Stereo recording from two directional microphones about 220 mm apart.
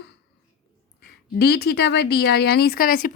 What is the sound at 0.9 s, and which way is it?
Speech, 45° left (ahead or behind).